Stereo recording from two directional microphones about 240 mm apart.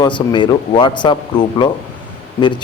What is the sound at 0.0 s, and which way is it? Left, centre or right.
A man's voice, centre.